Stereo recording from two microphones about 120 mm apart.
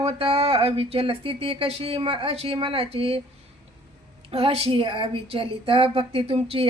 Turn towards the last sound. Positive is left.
turn(degrees=-55)  # may be behind; listen again after turning